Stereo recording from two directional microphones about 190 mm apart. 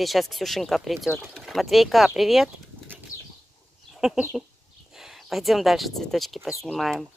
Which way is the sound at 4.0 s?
5° right (ahead or behind).